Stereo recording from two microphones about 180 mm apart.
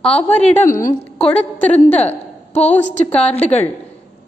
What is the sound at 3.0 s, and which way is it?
Speech, 5° left (ahead or behind).